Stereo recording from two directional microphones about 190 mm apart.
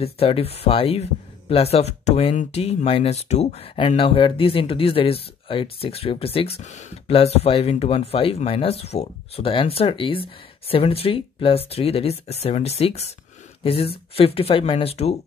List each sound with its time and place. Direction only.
0.0 s speech: 30° left (ahead or behind)
14.1 s speech: 30° left (ahead or behind)